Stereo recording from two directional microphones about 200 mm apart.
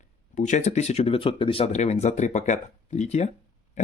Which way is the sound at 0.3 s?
35° left (ahead or behind).